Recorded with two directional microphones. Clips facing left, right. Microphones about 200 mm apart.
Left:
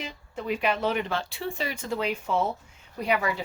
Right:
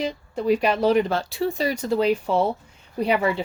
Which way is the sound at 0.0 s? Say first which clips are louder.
Right 10 dB; 35° right (ahead or behind).